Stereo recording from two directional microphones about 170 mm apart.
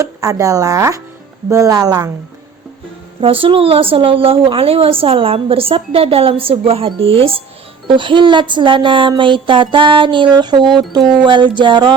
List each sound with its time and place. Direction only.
0.0 s speech: 20° right (ahead or behind)
3.2 s speech: 30° right (ahead or behind)